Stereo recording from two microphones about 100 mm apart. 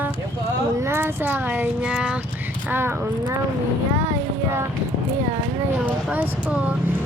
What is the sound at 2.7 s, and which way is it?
Speech, 20° right (ahead or behind).